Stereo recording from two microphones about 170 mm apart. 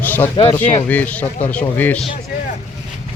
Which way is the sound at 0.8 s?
10° left (ahead or behind).